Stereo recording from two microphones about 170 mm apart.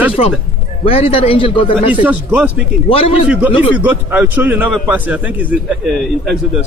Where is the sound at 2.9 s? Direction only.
35° left (ahead or behind).